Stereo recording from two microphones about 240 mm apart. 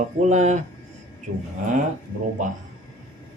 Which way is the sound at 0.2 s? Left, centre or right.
Right.